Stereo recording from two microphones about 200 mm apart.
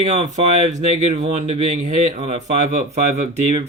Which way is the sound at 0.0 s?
35° right (ahead or behind).